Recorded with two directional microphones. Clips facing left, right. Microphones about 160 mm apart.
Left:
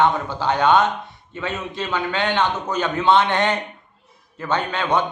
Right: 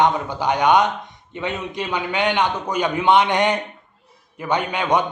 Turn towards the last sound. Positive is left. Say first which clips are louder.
# right 1 dB
turn(degrees=-15)  # may be behind; listen again after turning